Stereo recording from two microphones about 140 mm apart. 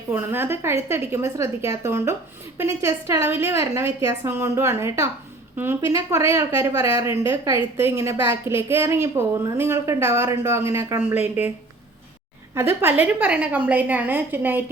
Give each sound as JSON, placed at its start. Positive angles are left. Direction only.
{"t": 0.1, "sound": "a woman's voice", "side_deg": -15}
{"t": 12.5, "sound": "a woman's voice", "side_deg": -15}